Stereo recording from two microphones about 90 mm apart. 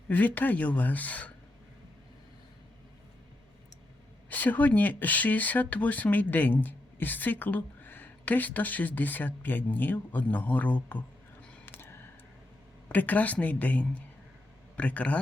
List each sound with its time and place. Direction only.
0.1 s speech: 20° left (ahead or behind)
4.3 s speech: 20° left (ahead or behind)
11.6 s a sound: 25° left (ahead or behind)
12.9 s speech: 20° left (ahead or behind)